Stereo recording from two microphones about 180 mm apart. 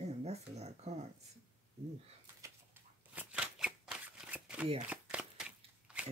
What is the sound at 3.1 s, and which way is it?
Shuffling cards, 5° right (ahead or behind).